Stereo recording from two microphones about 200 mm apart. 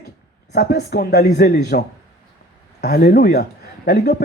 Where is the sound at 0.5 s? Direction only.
55° left (ahead or behind).